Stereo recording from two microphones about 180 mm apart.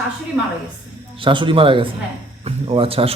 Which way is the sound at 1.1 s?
30° right (ahead or behind).